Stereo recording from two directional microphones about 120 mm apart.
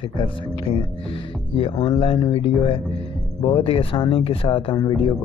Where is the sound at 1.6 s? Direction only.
50° left (ahead or behind).